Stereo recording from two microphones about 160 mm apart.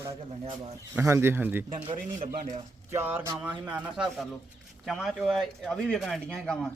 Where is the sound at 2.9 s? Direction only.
15° right (ahead or behind); by 6.5 s centre (ahead or behind).